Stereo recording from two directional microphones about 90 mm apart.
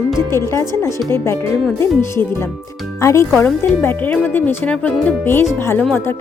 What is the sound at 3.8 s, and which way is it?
Speech, 20° left (ahead or behind).